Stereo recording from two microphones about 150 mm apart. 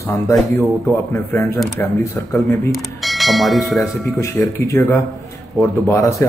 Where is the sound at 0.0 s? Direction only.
15° left (ahead or behind).